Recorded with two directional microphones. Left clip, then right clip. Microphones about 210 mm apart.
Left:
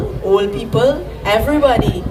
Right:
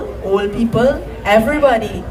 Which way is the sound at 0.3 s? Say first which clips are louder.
Left 2 dB; 20° left (ahead or behind).